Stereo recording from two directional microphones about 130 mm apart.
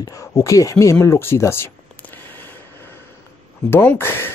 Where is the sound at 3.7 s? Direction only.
15° left (ahead or behind).